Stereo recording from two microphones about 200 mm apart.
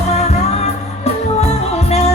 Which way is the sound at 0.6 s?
30° left (ahead or behind).